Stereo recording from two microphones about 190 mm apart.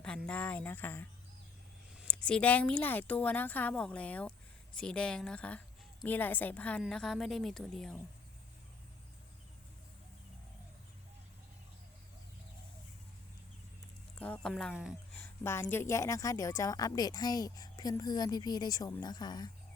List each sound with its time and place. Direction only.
0.3 s a woman's voice: 10° left (ahead or behind)
14.2 s a woman's voice: 5° left (ahead or behind)
15.1 s a woman's voice: 10° left (ahead or behind)